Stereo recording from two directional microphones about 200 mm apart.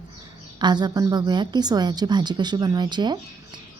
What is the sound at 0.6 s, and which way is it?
A woman's voice, 20° right (ahead or behind).